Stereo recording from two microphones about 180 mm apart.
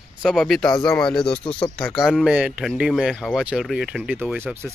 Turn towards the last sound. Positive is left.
turn(degrees=-10)  # may be behind; listen again after turning